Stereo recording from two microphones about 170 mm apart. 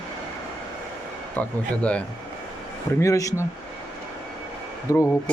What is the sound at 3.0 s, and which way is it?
Speech, 20° left (ahead or behind).